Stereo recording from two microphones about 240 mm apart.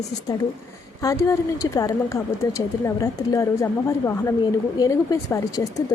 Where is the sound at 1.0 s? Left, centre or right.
Centre.